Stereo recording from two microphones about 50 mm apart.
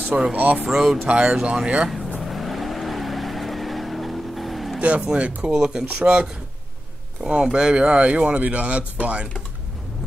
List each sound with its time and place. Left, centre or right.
0.0 s speech: right
0.7 s speech: centre
1.0 s speech: right
2.2 s vehicle: centre
4.7 s speech: right
5.5 s speech: centre
7.4 s speech: centre